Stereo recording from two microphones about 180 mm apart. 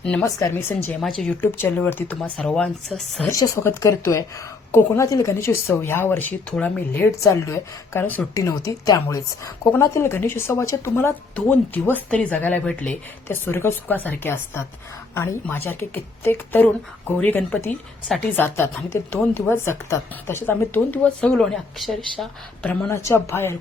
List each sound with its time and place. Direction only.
0.0 s a woman's voice: 5° left (ahead or behind)
3.2 s a woman's voice: 20° left (ahead or behind)